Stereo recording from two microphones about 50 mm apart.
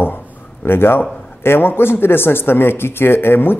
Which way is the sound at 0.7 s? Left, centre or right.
Left.